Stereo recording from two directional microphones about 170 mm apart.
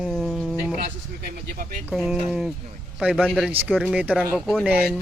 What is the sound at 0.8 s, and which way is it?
Speech, 55° right (ahead or behind).